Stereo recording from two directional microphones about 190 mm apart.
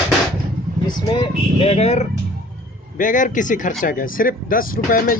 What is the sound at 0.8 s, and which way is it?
Speech, 25° left (ahead or behind).